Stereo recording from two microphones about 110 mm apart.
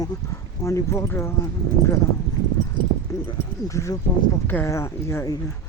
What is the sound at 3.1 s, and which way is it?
Horse, 30° left (ahead or behind).